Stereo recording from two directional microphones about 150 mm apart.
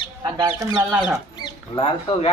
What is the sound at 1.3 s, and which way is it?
Speech, 30° left (ahead or behind).